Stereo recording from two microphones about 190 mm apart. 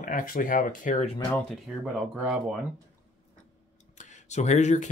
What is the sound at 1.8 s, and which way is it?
Speech, 5° right (ahead or behind).